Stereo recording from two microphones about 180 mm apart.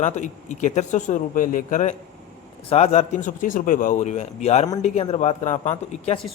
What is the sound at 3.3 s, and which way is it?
A man's voice, 50° left (ahead or behind).